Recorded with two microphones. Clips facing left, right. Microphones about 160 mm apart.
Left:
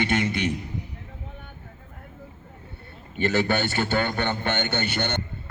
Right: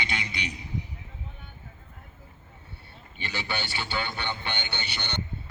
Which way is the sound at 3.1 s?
50° left (ahead or behind).